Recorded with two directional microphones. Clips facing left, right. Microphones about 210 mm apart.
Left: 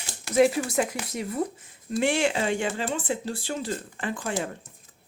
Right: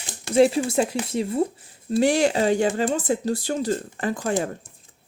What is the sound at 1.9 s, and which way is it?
Speech, 40° right (ahead or behind).